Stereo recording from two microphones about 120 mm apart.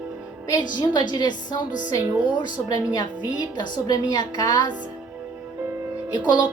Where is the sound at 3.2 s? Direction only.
35° left (ahead or behind).